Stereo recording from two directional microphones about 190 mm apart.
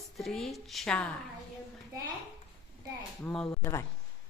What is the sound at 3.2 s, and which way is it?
Speech, 5° left (ahead or behind).